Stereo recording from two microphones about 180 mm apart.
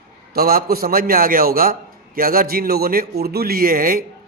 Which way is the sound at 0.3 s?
55° right (ahead or behind).